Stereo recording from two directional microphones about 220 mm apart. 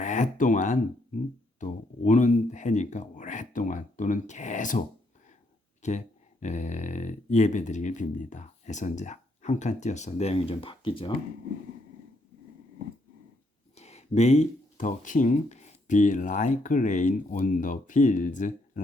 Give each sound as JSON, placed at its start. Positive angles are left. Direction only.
{"t": 0.0, "sound": "speech", "side_deg": 35}
{"t": 5.8, "sound": "speech", "side_deg": 30}
{"t": 13.7, "sound": "speech", "side_deg": 30}